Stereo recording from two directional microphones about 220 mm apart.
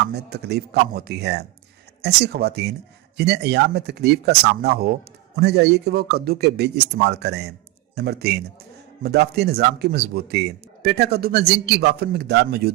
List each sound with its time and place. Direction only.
0.1 s speech: 50° right (ahead or behind)